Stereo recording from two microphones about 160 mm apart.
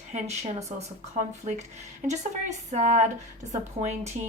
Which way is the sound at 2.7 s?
45° right (ahead or behind).